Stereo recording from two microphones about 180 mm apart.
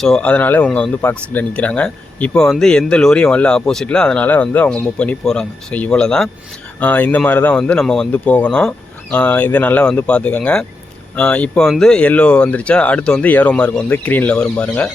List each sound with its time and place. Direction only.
0.0 s speech: 5° left (ahead or behind)